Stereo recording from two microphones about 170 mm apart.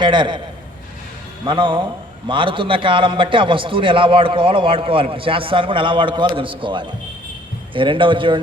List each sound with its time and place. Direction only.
0.0 s a man's voice: 30° right (ahead or behind)
1.5 s a man's voice: 30° right (ahead or behind)